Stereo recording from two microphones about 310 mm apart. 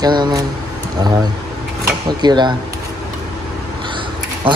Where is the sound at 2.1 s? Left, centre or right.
Centre.